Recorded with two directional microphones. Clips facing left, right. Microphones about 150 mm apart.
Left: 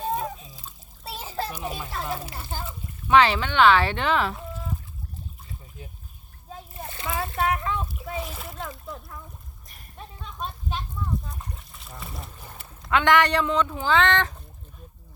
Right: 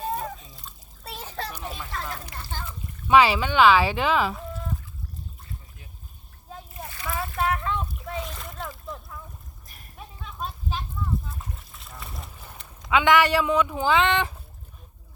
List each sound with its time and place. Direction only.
0.0 s splash: centre (ahead or behind)
1.6 s a child's voice: 15° left (ahead or behind)
3.1 s speech: 10° right (ahead or behind)
6.8 s a sound: 25° left (ahead or behind)
7.1 s splash: centre (ahead or behind)
9.6 s a sound: centre (ahead or behind)
11.3 s trickle: centre (ahead or behind)
12.5 s speech: centre (ahead or behind)